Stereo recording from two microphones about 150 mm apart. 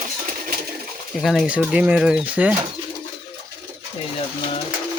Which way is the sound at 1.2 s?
Centre (ahead or behind).